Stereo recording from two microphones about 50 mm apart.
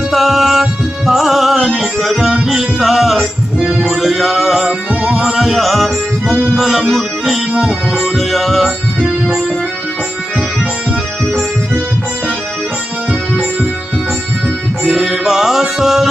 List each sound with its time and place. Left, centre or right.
0.1 s music: centre
5.5 s music: centre
7.5 s music: centre
8.0 s music: centre
15.0 s music: centre